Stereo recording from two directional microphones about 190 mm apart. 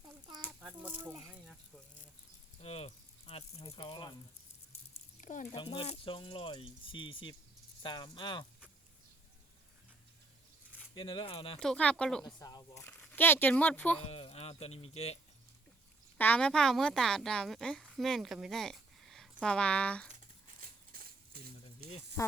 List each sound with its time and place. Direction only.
0.4 s chicken: 10° right (ahead or behind)
2.6 s rattle: 35° left (ahead or behind)
3.7 s speech: 25° left (ahead or behind)
5.2 s speech: 40° left (ahead or behind)
5.5 s speech: 30° left (ahead or behind)
10.9 s speech: 25° left (ahead or behind)
11.6 s speech: 5° left (ahead or behind)
12.2 s speech: 20° left (ahead or behind)
12.8 s speech: 10° left (ahead or behind)
14.1 s speech: 30° left (ahead or behind)
16.1 s speech: 10° left (ahead or behind)
20.1 s a sound: 50° right (ahead or behind)